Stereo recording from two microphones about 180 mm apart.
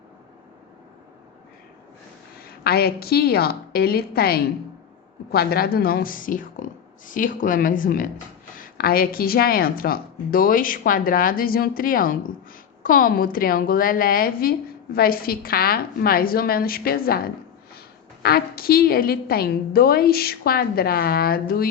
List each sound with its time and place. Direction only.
2.4 s a woman's voice: 60° left (ahead or behind)